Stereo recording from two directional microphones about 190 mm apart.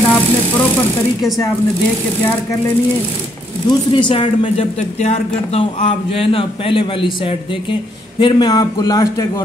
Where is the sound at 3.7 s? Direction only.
25° left (ahead or behind).